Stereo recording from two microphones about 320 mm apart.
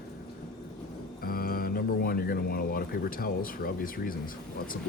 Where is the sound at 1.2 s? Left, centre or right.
Left.